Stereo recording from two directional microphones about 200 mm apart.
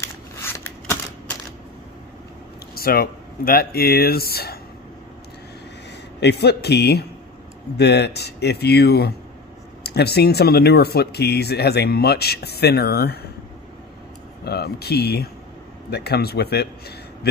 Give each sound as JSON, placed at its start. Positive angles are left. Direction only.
{"t": 0.0, "sound": "a sound", "side_deg": 10}
{"t": 2.8, "sound": "speech", "side_deg": 50}
{"t": 6.2, "sound": "speech", "side_deg": 55}
{"t": 14.4, "sound": "speech", "side_deg": 50}